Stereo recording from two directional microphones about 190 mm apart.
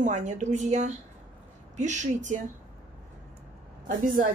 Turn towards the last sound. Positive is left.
turn(degrees=-45)  # may be behind; listen again after turning